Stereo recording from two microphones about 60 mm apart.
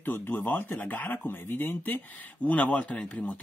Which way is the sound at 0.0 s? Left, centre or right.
Left.